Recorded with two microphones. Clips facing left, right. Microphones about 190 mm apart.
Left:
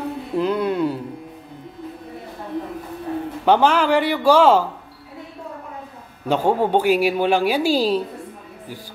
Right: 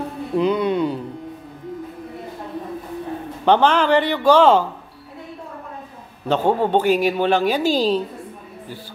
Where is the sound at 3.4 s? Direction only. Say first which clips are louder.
Right 1 dB; 10° left (ahead or behind).